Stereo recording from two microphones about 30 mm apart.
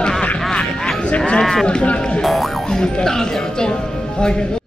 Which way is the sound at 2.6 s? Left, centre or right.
Left.